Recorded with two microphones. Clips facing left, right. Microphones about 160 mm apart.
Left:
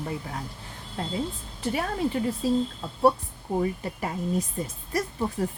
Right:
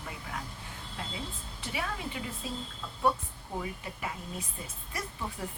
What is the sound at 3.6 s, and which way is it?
Speech, 40° left (ahead or behind).